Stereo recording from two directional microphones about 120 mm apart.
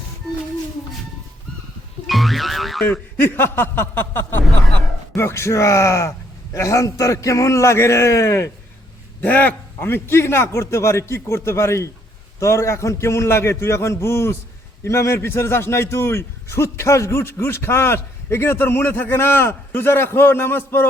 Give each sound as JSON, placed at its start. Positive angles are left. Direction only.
{"t": 2.0, "sound": "music", "side_deg": 0}
{"t": 2.9, "sound": "a man's voice", "side_deg": 15}